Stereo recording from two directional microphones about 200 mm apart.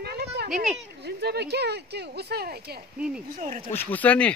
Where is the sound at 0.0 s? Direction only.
55° right (ahead or behind).